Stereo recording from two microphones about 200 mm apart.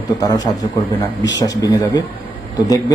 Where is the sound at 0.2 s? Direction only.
20° left (ahead or behind).